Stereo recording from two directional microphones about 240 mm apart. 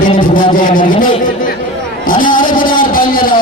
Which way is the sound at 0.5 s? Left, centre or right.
Left.